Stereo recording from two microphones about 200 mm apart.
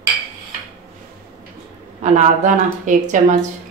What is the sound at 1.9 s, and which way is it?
Speech, 35° right (ahead or behind).